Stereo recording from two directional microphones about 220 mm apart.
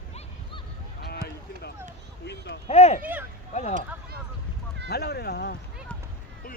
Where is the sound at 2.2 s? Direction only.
50° left (ahead or behind).